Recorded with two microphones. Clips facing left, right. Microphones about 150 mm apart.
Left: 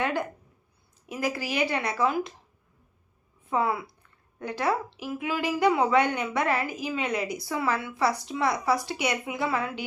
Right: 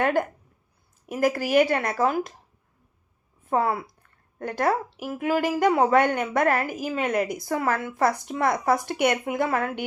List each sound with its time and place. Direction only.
0.0 s a woman's voice: 50° right (ahead or behind)
3.5 s a woman's voice: 45° right (ahead or behind)